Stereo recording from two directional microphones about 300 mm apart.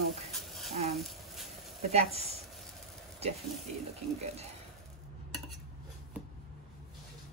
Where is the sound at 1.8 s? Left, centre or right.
Right.